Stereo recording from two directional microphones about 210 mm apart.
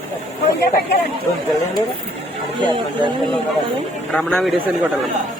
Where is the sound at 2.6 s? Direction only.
20° right (ahead or behind).